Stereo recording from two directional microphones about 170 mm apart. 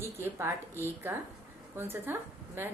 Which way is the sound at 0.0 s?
15° right (ahead or behind).